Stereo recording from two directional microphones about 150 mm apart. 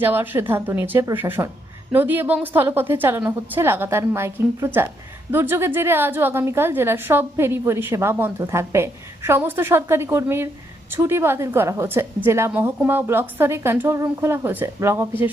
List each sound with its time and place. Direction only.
0.0 s a woman's voice: 15° right (ahead or behind)